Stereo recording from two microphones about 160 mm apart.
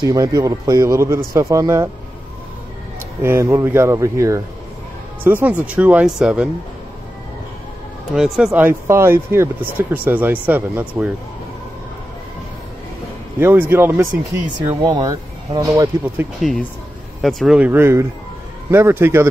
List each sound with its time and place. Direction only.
0.0 s a man's voice: 20° right (ahead or behind)
3.2 s speech: 15° right (ahead or behind)
8.1 s speech: 5° right (ahead or behind)
13.4 s speech: 15° right (ahead or behind)
14.4 s a man's voice: 30° right (ahead or behind)
17.2 s speech: centre (ahead or behind); by 19.2 s 15° right (ahead or behind)